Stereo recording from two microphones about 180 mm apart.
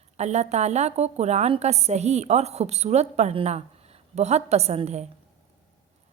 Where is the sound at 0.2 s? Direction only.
40° right (ahead or behind).